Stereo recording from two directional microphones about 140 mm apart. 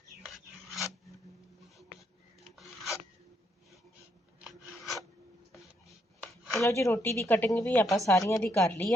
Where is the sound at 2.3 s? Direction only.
Centre (ahead or behind).